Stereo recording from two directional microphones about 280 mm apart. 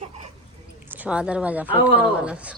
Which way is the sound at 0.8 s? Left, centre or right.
Centre.